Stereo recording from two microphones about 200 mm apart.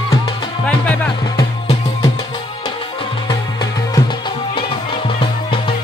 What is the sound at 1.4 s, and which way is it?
Music, 20° left (ahead or behind).